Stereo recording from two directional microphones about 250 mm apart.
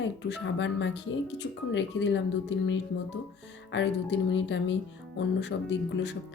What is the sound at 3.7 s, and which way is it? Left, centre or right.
Speech, left.